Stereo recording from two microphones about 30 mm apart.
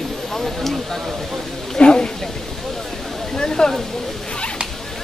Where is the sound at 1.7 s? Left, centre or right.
Left.